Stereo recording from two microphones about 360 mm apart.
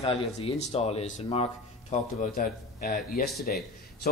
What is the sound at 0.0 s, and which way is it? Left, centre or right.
Speech, centre.